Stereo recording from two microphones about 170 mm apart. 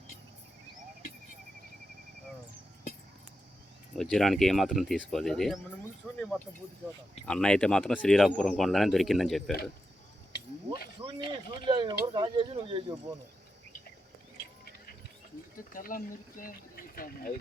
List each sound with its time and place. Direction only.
3.9 s speech: 5° left (ahead or behind)
6.1 s a sound: 5° left (ahead or behind)
7.3 s speech: 5° left (ahead or behind)
11.0 s speech: 30° right (ahead or behind)
15.7 s speech: 55° left (ahead or behind)